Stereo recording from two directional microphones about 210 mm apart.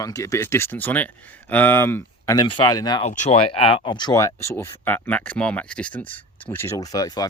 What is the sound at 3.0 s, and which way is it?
Speech, 35° left (ahead or behind).